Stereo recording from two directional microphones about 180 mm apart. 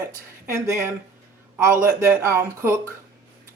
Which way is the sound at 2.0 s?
15° right (ahead or behind).